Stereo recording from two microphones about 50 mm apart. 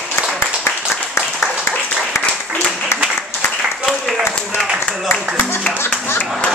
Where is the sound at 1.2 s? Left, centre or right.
Left.